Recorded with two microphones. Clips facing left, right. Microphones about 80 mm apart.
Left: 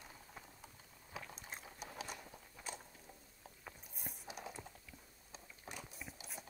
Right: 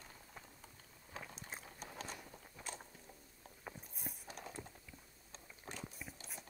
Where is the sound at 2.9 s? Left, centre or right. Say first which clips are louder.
Even; centre.